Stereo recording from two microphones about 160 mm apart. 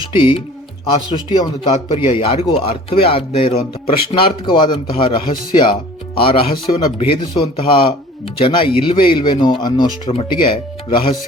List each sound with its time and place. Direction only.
0.0 s speech: 30° left (ahead or behind)